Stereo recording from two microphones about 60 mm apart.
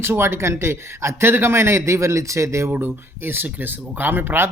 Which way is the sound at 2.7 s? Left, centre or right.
Right.